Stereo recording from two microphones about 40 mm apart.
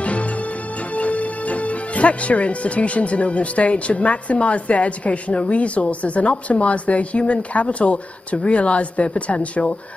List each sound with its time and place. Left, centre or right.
0.9 s speech: left